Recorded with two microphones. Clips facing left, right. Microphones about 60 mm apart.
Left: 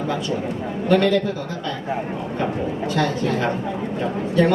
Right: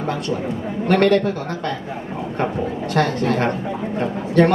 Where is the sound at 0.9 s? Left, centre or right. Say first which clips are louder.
Right 2 dB; right.